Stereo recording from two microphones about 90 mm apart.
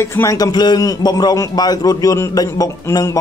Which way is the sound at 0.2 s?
40° left (ahead or behind).